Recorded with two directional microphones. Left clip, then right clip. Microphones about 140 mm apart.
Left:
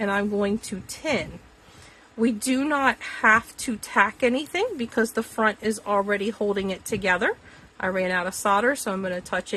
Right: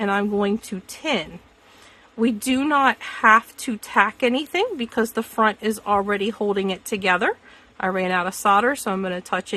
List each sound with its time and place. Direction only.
0.0 s a woman's voice: 40° right (ahead or behind)